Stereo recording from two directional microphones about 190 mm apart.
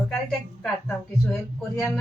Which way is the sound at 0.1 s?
Centre (ahead or behind).